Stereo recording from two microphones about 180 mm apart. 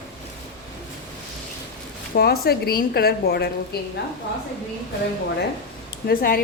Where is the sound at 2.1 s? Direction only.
60° left (ahead or behind).